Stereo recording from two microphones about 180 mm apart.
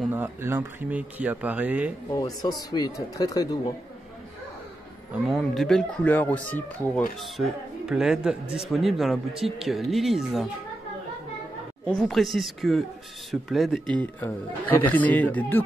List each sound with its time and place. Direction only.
0.1 s speech: 10° right (ahead or behind)
2.0 s speech: 20° left (ahead or behind)
5.3 s speech: centre (ahead or behind)
7.2 s speech: centre (ahead or behind)
11.8 s speech: 5° left (ahead or behind)
14.2 s speech: 10° left (ahead or behind)